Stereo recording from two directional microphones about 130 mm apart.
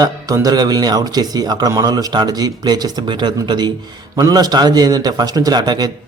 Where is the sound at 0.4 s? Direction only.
30° right (ahead or behind).